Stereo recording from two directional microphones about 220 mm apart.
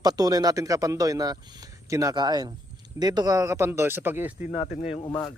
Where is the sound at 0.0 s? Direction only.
15° right (ahead or behind).